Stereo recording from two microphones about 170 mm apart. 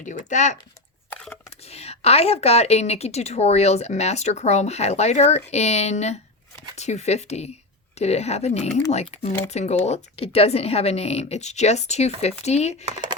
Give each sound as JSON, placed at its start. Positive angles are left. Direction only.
{"t": 0.0, "sound": "speech", "side_deg": 45}
{"t": 1.1, "sound": "a sound", "side_deg": 10}
{"t": 1.6, "sound": "a woman's voice", "side_deg": 40}